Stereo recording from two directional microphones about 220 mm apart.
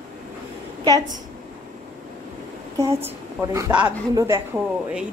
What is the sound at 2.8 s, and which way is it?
A woman's voice, 10° right (ahead or behind).